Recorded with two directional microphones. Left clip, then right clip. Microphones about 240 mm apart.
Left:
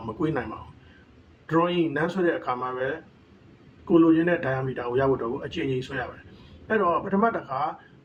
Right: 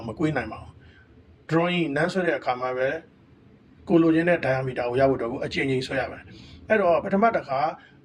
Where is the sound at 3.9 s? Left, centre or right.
Right.